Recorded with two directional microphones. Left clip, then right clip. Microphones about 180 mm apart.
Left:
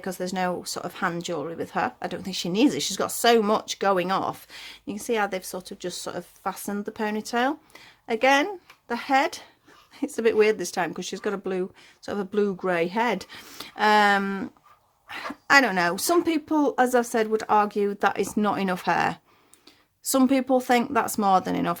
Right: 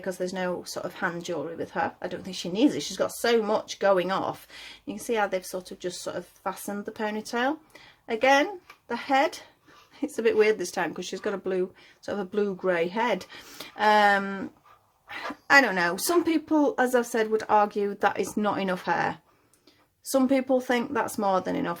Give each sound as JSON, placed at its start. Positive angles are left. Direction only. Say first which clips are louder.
{"t": 0.0, "sound": "speech", "louder": "left 2 dB", "side_deg": 30}